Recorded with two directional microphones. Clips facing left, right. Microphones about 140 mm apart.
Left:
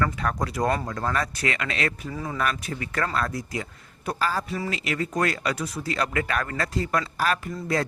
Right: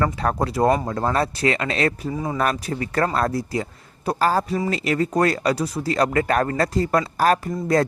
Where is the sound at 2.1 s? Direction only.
25° right (ahead or behind).